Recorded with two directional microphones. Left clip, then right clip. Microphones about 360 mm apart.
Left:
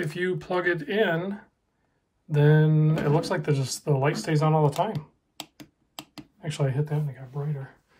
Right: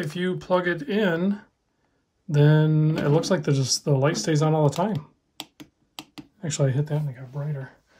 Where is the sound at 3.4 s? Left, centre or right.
Centre.